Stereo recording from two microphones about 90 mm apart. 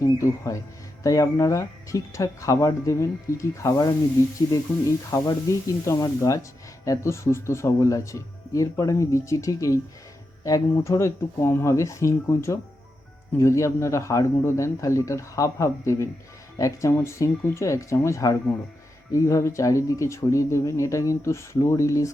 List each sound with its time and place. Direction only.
0.0 s speech: 35° left (ahead or behind)
5.1 s speech: 40° left (ahead or behind)